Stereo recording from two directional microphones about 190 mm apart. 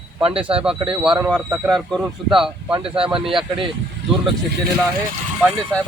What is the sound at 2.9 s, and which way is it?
Speech, 30° right (ahead or behind).